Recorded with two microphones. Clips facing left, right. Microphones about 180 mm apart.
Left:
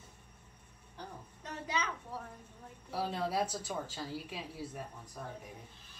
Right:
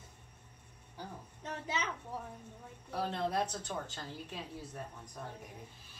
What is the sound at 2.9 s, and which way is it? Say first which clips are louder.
A woman's voice: even; 10° left (ahead or behind).